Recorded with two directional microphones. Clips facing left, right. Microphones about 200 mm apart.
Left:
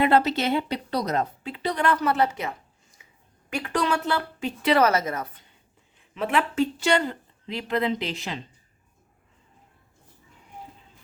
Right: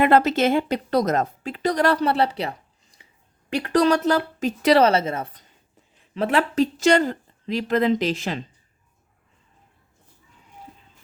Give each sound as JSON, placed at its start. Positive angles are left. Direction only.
{"t": 0.0, "sound": "a woman's voice", "side_deg": -50}
{"t": 4.8, "sound": "a woman's voice", "side_deg": -30}